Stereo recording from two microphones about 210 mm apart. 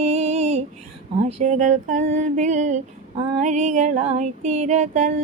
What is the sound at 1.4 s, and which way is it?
Female singing, 35° right (ahead or behind).